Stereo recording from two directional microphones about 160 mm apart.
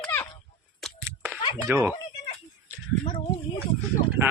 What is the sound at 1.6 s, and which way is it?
Speech, 15° right (ahead or behind).